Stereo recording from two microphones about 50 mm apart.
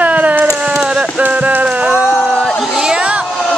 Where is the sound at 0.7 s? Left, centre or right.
Centre.